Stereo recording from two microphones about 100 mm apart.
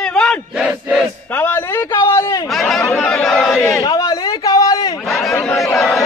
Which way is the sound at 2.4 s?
Centre (ahead or behind).